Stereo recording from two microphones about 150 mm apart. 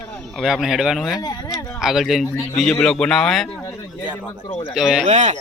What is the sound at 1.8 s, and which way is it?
Speech, 5° right (ahead or behind).